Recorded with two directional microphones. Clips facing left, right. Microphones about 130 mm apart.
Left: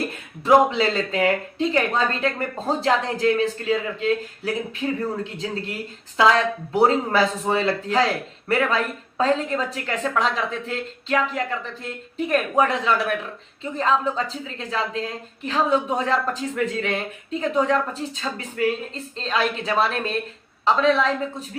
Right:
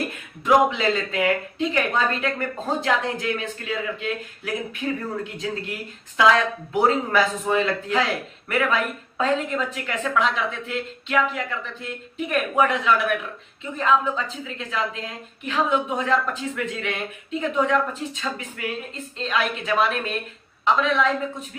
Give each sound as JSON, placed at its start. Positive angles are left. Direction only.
{"t": 0.4, "sound": "a man's voice", "side_deg": 35}